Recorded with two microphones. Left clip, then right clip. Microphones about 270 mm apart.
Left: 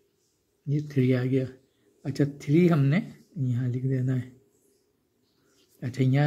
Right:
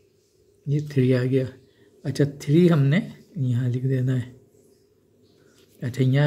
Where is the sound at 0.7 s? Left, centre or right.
Centre.